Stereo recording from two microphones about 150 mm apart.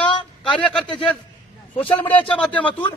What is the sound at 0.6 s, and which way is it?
Speech, 5° left (ahead or behind).